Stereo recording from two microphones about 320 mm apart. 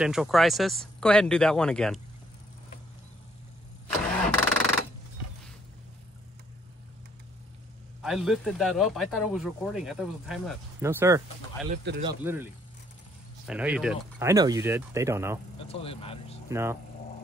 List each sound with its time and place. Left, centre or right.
0.0 s speech: centre
4.3 s a sound: centre
8.0 s speech: centre
11.7 s speech: right
12.0 s speech: centre
13.5 s speech: centre
15.6 s speech: centre
16.4 s speech: centre